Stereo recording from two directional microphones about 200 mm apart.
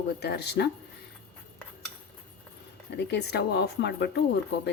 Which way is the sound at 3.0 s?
60° left (ahead or behind).